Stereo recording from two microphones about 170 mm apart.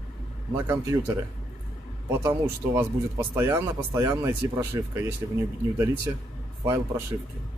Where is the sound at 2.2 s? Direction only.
15° right (ahead or behind).